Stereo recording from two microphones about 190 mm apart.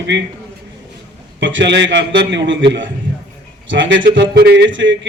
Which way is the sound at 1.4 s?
75° right (ahead or behind).